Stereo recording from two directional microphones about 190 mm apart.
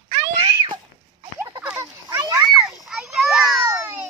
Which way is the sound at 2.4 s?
5° right (ahead or behind).